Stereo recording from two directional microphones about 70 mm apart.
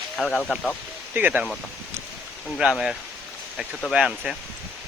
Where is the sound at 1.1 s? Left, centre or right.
Right.